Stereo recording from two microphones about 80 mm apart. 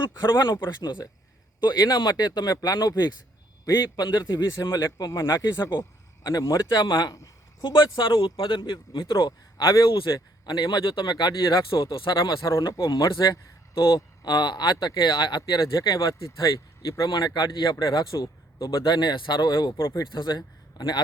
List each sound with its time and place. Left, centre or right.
0.0 s speech: left
7.6 s speech: left
9.6 s speech: left
9.8 s speech: left
10.2 s speech: left
12.8 s speech: left
13.7 s speech: left
15.5 s speech: left
17.1 s speech: left
18.7 s speech: left
19.8 s speech: left
20.1 s a man's voice: left